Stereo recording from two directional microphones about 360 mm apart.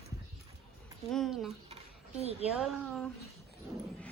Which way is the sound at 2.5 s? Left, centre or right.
Centre.